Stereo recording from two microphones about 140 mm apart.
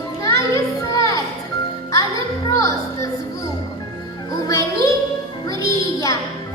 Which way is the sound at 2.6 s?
25° left (ahead or behind).